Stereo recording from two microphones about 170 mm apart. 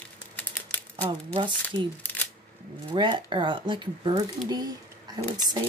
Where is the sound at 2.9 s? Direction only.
30° right (ahead or behind).